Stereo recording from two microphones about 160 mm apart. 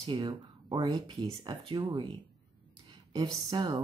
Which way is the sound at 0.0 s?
30° right (ahead or behind).